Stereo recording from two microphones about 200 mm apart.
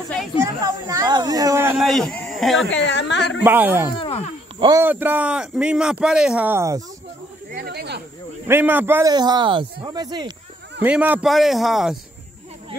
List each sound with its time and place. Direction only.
0.6 s speech: 15° right (ahead or behind)
1.8 s speech: centre (ahead or behind)
2.7 s a woman's voice: 60° left (ahead or behind)
3.4 s speech: 10° right (ahead or behind)
3.9 s speech: 30° left (ahead or behind)
4.6 s a man's voice: 20° right (ahead or behind)
4.8 s speech: 10° right (ahead or behind)
7.5 s speech: 55° right (ahead or behind)
8.5 s speech: 10° right (ahead or behind)
10.8 s speech: 10° right (ahead or behind)